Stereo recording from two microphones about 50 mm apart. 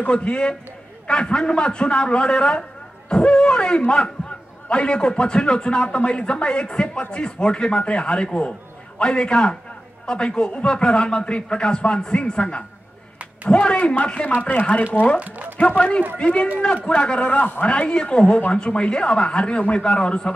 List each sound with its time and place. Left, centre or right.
0.0 s a man's voice: left
15.2 s speech: right
15.6 s a man's voice: left